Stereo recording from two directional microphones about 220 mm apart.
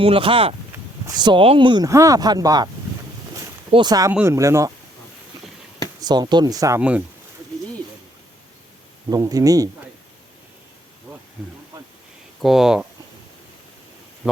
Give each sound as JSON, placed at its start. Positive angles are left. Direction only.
{"t": 0.0, "sound": "speech", "side_deg": -25}
{"t": 3.7, "sound": "speech", "side_deg": -20}
{"t": 6.0, "sound": "speech", "side_deg": -20}
{"t": 9.0, "sound": "speech", "side_deg": -15}
{"t": 12.4, "sound": "speech", "side_deg": 0}